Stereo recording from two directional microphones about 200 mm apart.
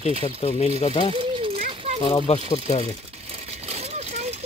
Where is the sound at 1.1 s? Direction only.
25° right (ahead or behind).